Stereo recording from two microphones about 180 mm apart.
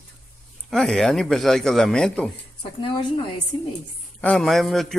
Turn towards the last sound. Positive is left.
turn(degrees=0)  # may be behind; listen again after turning